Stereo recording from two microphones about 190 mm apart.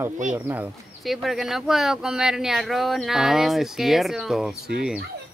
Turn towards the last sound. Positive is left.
turn(degrees=-5)  # may be behind; listen again after turning